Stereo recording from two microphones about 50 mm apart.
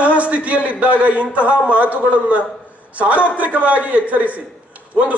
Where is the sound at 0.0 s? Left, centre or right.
Right.